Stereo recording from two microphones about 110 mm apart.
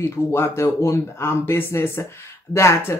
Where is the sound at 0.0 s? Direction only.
20° left (ahead or behind).